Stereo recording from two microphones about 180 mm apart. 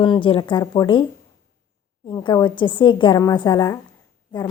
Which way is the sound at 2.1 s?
25° left (ahead or behind).